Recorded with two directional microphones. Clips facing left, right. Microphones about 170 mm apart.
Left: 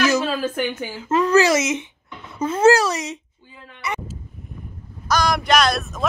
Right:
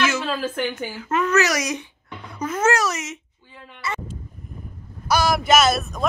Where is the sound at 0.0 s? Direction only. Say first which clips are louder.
Left 4 dB; 40° left (ahead or behind).